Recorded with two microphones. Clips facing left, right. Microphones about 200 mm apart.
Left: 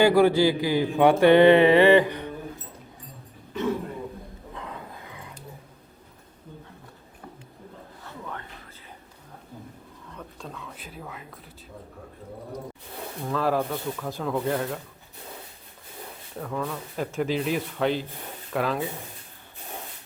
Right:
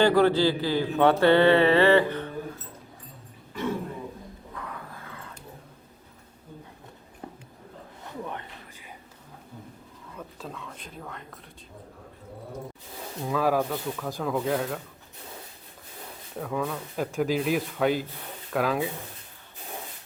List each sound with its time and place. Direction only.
0.0 s a man's voice: 10° left (ahead or behind)
4.5 s a sound: 20° left (ahead or behind)
8.0 s a sound: 20° right (ahead or behind)
10.2 s speech: centre (ahead or behind)
13.2 s speech: 5° right (ahead or behind)
13.6 s speech: 5° left (ahead or behind)
16.4 s speech: centre (ahead or behind)